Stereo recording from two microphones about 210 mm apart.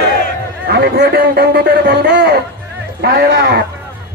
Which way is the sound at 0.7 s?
50° right (ahead or behind).